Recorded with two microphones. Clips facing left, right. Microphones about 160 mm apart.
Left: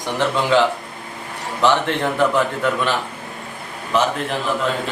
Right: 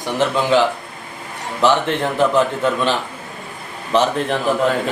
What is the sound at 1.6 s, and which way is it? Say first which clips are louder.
Speech: right 1 dB; 20° right (ahead or behind).